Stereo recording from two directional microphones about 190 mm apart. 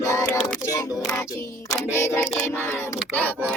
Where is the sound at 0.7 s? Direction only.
20° left (ahead or behind).